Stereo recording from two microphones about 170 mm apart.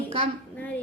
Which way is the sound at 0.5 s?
10° left (ahead or behind).